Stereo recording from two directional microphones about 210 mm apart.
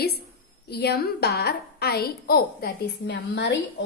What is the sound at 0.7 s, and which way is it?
A woman's voice, 50° left (ahead or behind).